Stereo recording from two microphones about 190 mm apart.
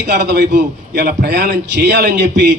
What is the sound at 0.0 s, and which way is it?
A man's voice, 65° right (ahead or behind).